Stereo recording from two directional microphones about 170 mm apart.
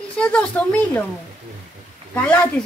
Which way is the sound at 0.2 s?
10° left (ahead or behind).